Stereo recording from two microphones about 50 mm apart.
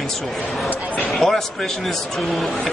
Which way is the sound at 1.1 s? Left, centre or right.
Centre.